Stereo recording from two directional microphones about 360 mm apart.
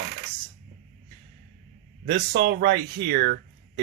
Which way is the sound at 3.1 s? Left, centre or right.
Right.